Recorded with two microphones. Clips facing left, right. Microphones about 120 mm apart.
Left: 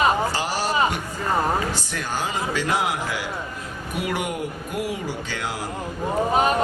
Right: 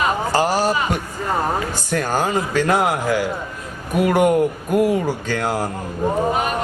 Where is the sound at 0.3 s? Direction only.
45° right (ahead or behind).